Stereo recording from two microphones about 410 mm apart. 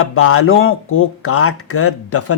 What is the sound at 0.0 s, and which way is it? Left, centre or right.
Speech, left.